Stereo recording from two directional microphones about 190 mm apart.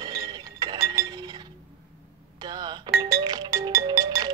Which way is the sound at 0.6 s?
20° right (ahead or behind).